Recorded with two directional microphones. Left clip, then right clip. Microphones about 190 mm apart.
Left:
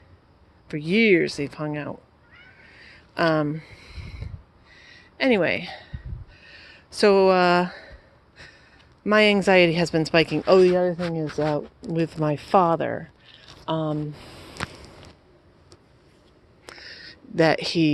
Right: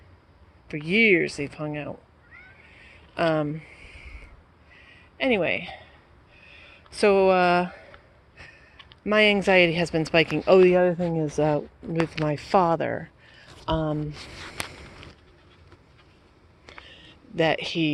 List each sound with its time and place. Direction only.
0.7 s speech: 25° left (ahead or behind)
2.7 s a sound: 25° left (ahead or behind)
8.4 s sniff: 25° left (ahead or behind)
9.0 s speech: 25° left (ahead or behind); by 11.1 s 5° right (ahead or behind)
11.1 s speech: 15° right (ahead or behind)
11.4 s speech: centre (ahead or behind)
11.9 s speech: 15° left (ahead or behind)
17.3 s speech: 35° left (ahead or behind)